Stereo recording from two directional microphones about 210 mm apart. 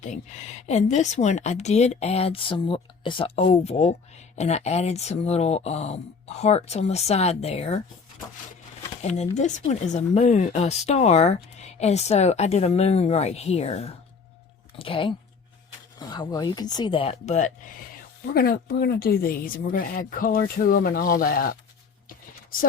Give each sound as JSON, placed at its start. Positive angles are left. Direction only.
{"t": 0.0, "sound": "speech", "side_deg": 35}
{"t": 9.0, "sound": "speech", "side_deg": 30}